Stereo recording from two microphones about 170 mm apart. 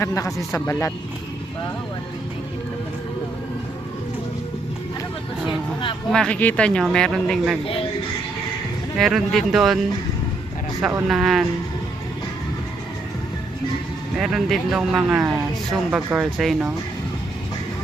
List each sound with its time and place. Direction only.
0.0 s a man's voice: 20° left (ahead or behind)
6.1 s speech: 5° left (ahead or behind)
9.0 s speech: centre (ahead or behind)
10.8 s speech: 5° right (ahead or behind)
14.2 s speech: centre (ahead or behind)